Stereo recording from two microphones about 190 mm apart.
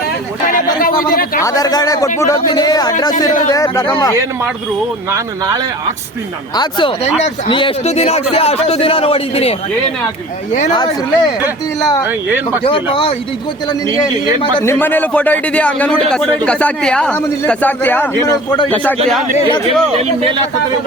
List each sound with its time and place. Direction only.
0.4 s a sound: 50° left (ahead or behind)
1.4 s speech: 20° left (ahead or behind)
6.6 s speech: 25° left (ahead or behind)
10.7 s speech: 20° left (ahead or behind)
12.6 s speech: 25° left (ahead or behind)
14.6 s speech: 10° left (ahead or behind)